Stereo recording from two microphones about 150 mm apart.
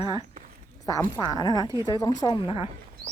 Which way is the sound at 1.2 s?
25° left (ahead or behind).